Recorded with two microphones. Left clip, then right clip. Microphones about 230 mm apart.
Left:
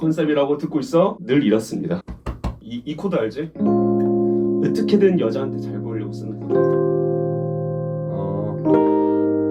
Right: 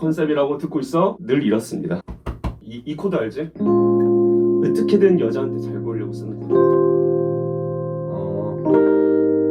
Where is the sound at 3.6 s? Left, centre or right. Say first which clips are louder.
Right 3 dB; left.